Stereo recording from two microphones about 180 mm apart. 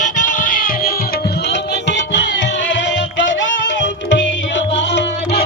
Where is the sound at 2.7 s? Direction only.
85° left.